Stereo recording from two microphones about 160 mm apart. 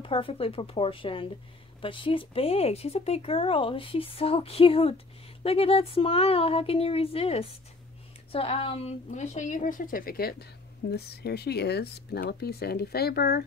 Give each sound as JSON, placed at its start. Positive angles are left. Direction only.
{"t": 0.0, "sound": "a woman's voice", "side_deg": 35}
{"t": 10.9, "sound": "speech", "side_deg": 90}